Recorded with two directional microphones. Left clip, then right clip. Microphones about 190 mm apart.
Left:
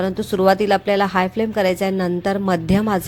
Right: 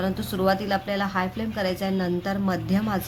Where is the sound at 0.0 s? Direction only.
30° left (ahead or behind).